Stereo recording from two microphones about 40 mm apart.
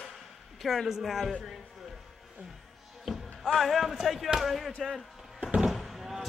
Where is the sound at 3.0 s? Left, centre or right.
Centre.